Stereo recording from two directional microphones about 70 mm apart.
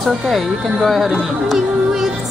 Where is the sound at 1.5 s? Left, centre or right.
Centre.